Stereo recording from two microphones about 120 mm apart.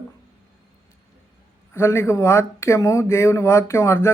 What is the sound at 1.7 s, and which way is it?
Speech, 20° left (ahead or behind).